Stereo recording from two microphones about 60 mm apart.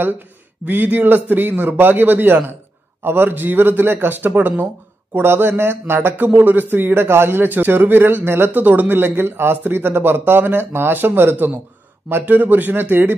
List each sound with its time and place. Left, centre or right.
0.7 s speech: right